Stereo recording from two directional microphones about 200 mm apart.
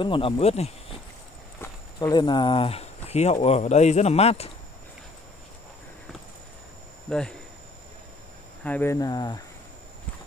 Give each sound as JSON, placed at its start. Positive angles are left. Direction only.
{"t": 0.0, "sound": "speech", "side_deg": 25}
{"t": 1.6, "sound": "speech", "side_deg": 20}
{"t": 7.1, "sound": "speech", "side_deg": 5}
{"t": 8.6, "sound": "speech", "side_deg": 10}